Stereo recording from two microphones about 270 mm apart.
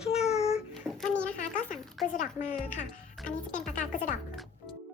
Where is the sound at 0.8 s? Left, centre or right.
Centre.